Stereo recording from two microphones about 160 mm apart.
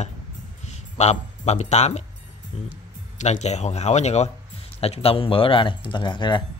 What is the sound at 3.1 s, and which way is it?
Speech, 45° left (ahead or behind).